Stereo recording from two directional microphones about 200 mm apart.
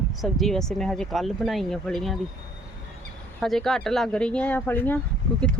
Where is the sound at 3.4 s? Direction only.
Centre (ahead or behind).